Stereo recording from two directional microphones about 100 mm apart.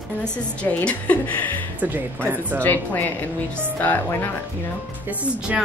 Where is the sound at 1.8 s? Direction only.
20° right (ahead or behind).